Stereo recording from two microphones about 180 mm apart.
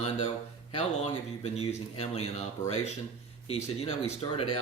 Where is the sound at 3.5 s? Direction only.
35° left (ahead or behind).